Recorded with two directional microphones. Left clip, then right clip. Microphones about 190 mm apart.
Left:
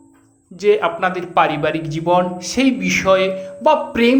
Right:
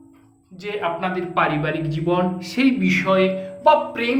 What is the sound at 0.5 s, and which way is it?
A man's voice, 50° left (ahead or behind).